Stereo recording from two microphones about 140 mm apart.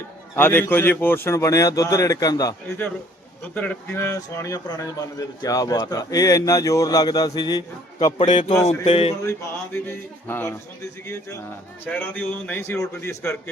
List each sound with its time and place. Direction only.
0.3 s speech: 15° left (ahead or behind)
3.5 s speech: 15° left (ahead or behind); by 8.1 s 30° left (ahead or behind)
8.2 s a man's voice: 60° left (ahead or behind)
8.8 s a sound: 45° left (ahead or behind)
9.2 s a man's voice: 20° left (ahead or behind)
11.9 s a man's voice: 10° left (ahead or behind)